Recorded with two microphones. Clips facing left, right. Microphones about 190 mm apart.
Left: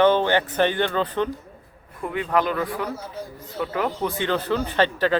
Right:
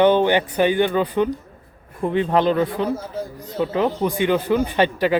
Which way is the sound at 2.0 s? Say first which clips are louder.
Right 5 dB; 30° right (ahead or behind).